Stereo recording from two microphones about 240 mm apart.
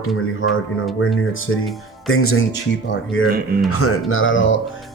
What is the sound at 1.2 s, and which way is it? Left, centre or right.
Speech, left.